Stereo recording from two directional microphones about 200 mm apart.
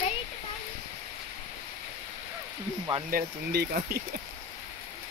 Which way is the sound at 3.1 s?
45° right (ahead or behind).